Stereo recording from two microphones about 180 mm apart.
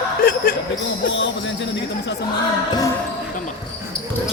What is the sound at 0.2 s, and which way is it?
Speech, 55° left (ahead or behind).